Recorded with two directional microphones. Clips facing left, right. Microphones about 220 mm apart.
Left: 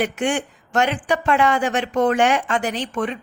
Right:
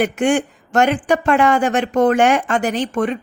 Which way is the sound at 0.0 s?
45° right (ahead or behind).